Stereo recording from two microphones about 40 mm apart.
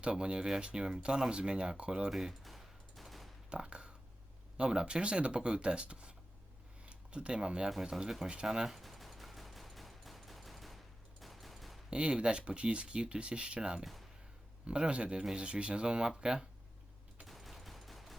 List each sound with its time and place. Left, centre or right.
0.0 s speech: right
2.0 s speech: centre
2.4 s fusillade: centre
3.5 s speech: right
8.4 s a sound: centre
11.2 s fusillade: centre
11.9 s speech: right
17.2 s fusillade: centre